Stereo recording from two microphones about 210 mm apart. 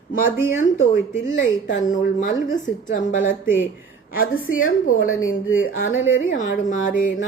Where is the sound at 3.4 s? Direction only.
10° right (ahead or behind).